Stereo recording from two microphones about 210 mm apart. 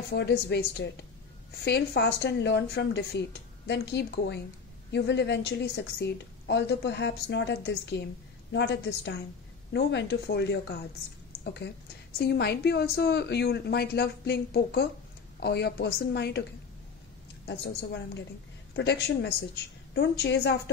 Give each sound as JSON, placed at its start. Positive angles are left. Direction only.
{"t": 0.1, "sound": "a woman's voice", "side_deg": 55}
{"t": 12.2, "sound": "speech", "side_deg": 50}
{"t": 17.5, "sound": "a woman's voice", "side_deg": 55}